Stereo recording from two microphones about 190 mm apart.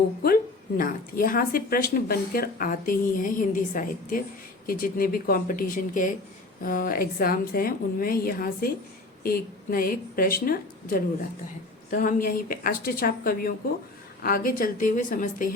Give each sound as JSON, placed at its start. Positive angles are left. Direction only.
{"t": 0.8, "sound": "speech", "side_deg": 50}